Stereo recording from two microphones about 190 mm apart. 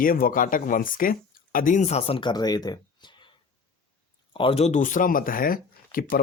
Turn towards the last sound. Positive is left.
turn(degrees=50)  # may be behind; listen again after turning